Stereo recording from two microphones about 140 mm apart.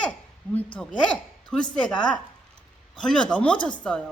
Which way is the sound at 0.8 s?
5° left (ahead or behind).